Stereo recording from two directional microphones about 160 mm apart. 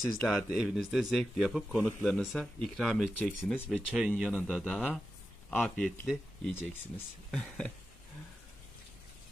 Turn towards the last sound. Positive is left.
turn(degrees=5)  # may be behind; listen again after turning